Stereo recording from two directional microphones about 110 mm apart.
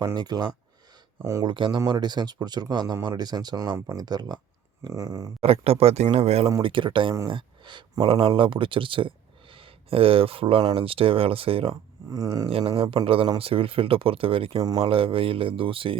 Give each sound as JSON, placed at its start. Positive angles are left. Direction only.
{"t": 0.0, "sound": "speech", "side_deg": -40}
{"t": 1.2, "sound": "speech", "side_deg": -25}
{"t": 1.5, "sound": "speech", "side_deg": -45}
{"t": 5.4, "sound": "speech", "side_deg": -65}
{"t": 6.6, "sound": "speech", "side_deg": -50}
{"t": 12.1, "sound": "speech", "side_deg": -35}
{"t": 12.5, "sound": "speech", "side_deg": -60}